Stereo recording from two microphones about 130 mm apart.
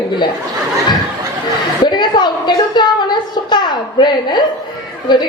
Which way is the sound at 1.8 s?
35° left (ahead or behind).